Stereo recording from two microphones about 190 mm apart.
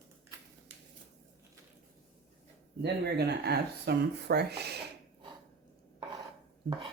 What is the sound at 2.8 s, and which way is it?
Speech, 60° right (ahead or behind).